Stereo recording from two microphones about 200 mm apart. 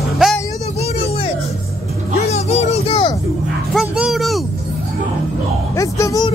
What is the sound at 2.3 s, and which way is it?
Music, 35° left (ahead or behind).